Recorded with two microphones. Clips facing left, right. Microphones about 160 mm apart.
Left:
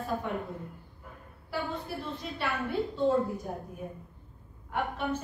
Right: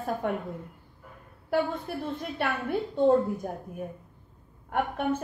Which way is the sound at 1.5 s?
55° right (ahead or behind).